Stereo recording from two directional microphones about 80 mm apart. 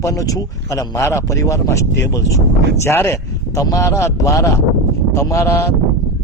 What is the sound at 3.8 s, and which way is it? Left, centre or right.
Speech, left.